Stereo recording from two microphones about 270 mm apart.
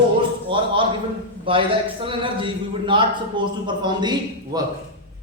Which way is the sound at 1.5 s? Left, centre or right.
Centre.